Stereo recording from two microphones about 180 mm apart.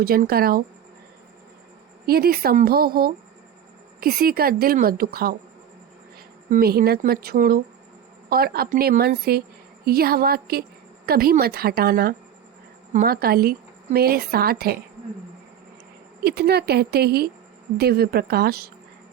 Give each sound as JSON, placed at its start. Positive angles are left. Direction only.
{"t": 0.0, "sound": "a woman's voice", "side_deg": -55}
{"t": 2.0, "sound": "a woman's voice", "side_deg": -60}
{"t": 6.5, "sound": "a woman's voice", "side_deg": -55}
{"t": 16.2, "sound": "a woman's voice", "side_deg": -60}